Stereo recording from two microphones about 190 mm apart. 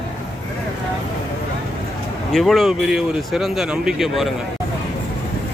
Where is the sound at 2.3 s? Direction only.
Centre (ahead or behind).